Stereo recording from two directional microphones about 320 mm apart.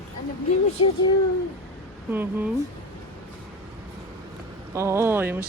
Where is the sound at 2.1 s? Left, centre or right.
Centre.